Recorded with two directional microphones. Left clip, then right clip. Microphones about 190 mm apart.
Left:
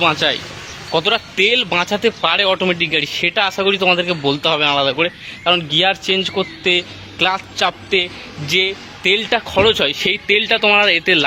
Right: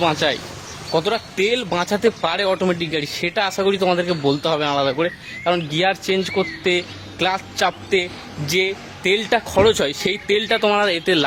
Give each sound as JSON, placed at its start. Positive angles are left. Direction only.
{"t": 0.0, "sound": "speech", "side_deg": -15}
{"t": 0.9, "sound": "speech", "side_deg": 0}